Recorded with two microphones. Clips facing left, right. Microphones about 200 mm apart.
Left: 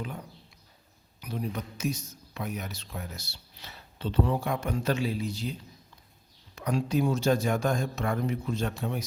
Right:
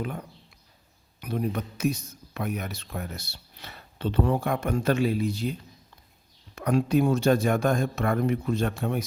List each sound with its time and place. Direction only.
1.2 s speech: 55° right (ahead or behind)
6.6 s speech: 55° right (ahead or behind)